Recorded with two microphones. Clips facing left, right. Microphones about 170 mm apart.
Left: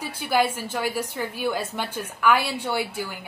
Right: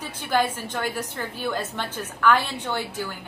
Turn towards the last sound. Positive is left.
turn(degrees=10)  # may be behind; listen again after turning